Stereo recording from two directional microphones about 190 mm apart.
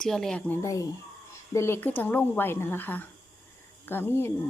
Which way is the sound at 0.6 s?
15° left (ahead or behind).